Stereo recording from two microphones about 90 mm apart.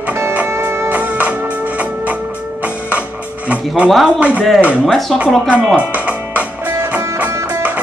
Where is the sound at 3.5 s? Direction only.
15° right (ahead or behind).